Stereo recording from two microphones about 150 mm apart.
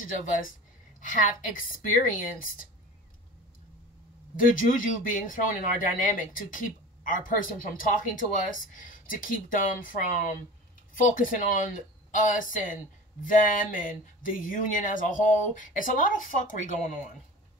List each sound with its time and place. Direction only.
0.0 s a woman's voice: 65° left (ahead or behind)
4.4 s speech: 65° left (ahead or behind)